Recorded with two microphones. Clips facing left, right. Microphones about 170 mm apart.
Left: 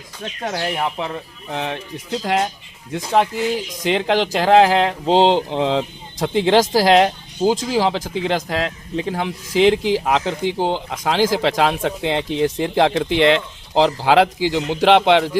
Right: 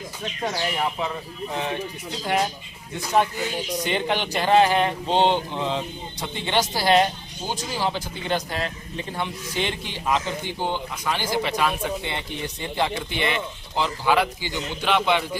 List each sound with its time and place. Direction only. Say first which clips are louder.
0.4 s speech: left 3 dB; 60° left (ahead or behind)
1.5 s speech: left 3 dB; 80° left
2.9 s speech: left 4 dB; 90° left